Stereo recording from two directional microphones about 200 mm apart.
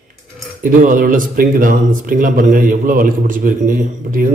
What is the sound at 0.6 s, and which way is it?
Speech, 40° right (ahead or behind).